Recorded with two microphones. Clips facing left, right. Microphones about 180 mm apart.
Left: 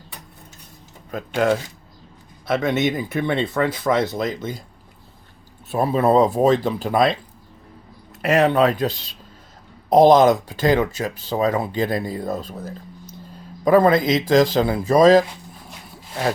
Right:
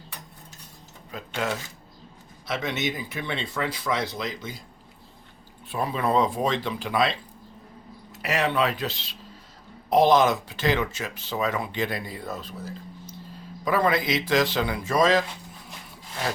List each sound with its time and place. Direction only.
1.1 s speech: 50° left (ahead or behind)
5.7 s speech: 40° left (ahead or behind)
8.2 s speech: 50° left (ahead or behind)